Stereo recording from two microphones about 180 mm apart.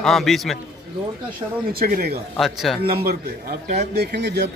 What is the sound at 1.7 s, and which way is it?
Speech, 55° right (ahead or behind).